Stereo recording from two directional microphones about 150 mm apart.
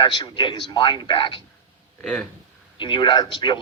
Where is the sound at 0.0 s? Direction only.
30° left (ahead or behind).